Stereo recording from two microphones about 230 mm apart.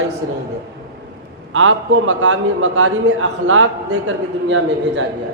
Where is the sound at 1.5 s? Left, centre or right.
Right.